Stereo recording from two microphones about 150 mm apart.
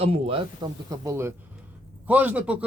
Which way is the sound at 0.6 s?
20° right (ahead or behind).